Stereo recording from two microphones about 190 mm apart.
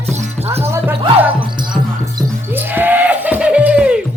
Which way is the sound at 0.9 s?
30° right (ahead or behind).